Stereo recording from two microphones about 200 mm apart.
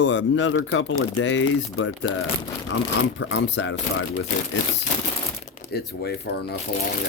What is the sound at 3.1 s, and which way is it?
Speech, 65° left (ahead or behind).